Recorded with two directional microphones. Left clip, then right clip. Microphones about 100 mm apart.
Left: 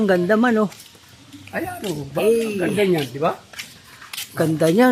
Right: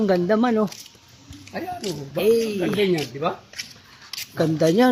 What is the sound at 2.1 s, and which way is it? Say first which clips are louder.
Speech: left 1 dB; 15° right (ahead or behind).